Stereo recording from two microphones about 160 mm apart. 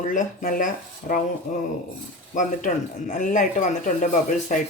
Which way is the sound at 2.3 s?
55° left (ahead or behind).